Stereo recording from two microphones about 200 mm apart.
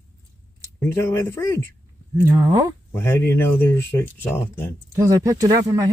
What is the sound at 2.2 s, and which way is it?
Speech, 15° right (ahead or behind).